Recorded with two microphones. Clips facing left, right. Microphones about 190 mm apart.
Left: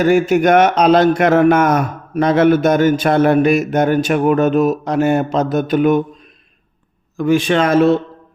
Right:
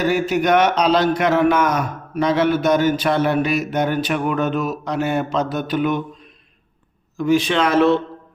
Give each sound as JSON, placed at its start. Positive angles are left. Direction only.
{"t": 0.0, "sound": "a man's voice", "side_deg": 50}
{"t": 7.2, "sound": "a man's voice", "side_deg": 55}